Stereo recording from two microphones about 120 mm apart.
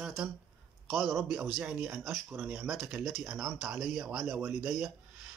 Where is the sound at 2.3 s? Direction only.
15° right (ahead or behind).